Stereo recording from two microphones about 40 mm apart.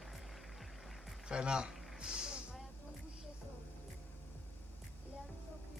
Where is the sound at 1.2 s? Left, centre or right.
Right.